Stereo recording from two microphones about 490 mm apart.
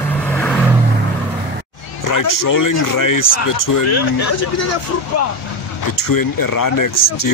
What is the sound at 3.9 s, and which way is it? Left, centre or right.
Speech, left.